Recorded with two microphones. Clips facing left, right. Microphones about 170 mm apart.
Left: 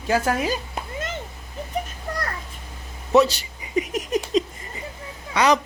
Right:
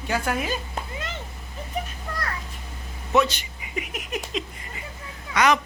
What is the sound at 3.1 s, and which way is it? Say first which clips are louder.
A woman's voice: left 4 dB; 35° left (ahead or behind).